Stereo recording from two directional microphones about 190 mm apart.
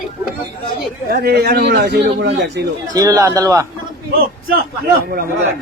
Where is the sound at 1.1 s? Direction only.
55° right (ahead or behind).